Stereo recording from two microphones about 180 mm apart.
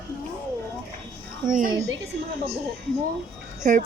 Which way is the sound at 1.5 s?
45° right (ahead or behind).